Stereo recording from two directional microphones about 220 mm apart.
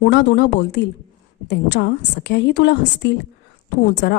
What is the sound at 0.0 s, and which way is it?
A woman's voice, 50° left (ahead or behind).